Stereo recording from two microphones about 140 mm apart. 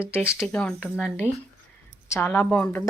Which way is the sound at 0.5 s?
5° left (ahead or behind).